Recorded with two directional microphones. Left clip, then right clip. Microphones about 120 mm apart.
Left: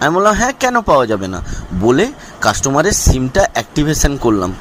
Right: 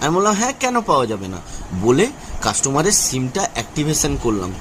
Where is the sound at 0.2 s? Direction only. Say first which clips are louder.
Left 5 dB; 40° left (ahead or behind).